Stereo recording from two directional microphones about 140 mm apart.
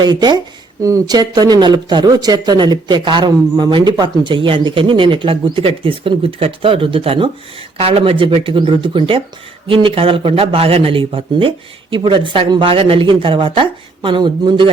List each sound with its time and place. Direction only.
0.0 s speech: 30° right (ahead or behind)